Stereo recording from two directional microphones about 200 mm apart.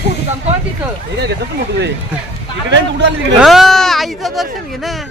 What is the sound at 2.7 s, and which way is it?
Speech, 60° right (ahead or behind).